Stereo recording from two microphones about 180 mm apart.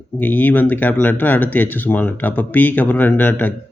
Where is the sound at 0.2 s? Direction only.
10° left (ahead or behind).